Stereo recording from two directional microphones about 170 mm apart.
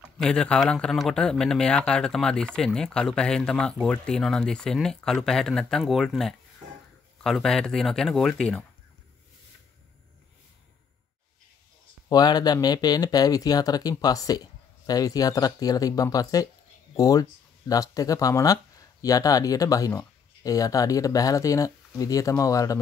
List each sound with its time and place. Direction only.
0.2 s speech: 5° left (ahead or behind)
12.1 s speech: 25° left (ahead or behind)